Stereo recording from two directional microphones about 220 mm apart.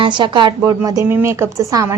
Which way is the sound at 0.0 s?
20° right (ahead or behind).